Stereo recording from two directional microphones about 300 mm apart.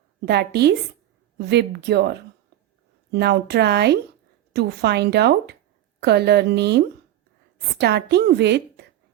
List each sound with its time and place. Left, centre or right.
0.3 s a woman's voice: right